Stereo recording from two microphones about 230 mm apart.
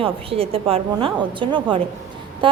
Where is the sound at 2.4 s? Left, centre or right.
Right.